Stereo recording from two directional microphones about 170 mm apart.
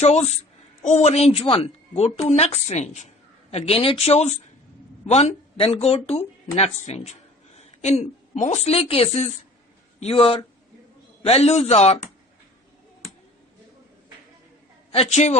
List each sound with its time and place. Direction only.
0.0 s a woman's voice: 40° left (ahead or behind)
14.9 s a woman's voice: 40° left (ahead or behind)